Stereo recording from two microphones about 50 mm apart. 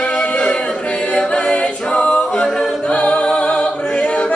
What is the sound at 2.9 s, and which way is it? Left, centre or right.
Music, left.